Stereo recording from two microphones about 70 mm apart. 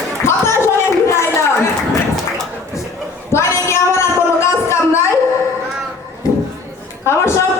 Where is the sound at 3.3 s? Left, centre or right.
Left.